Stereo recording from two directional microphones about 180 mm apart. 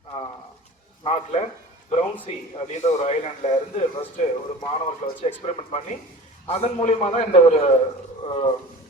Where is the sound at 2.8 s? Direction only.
40° left (ahead or behind).